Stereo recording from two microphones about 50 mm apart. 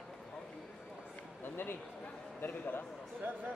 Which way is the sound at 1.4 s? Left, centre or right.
Left.